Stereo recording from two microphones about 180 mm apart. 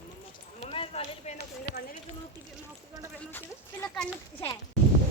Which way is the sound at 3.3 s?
10° left (ahead or behind).